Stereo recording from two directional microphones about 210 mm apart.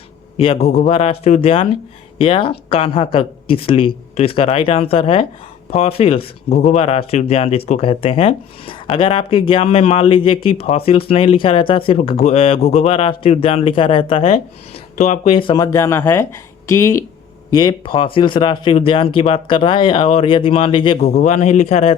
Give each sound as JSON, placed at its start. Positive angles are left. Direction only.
{"t": 0.3, "sound": "speech", "side_deg": 25}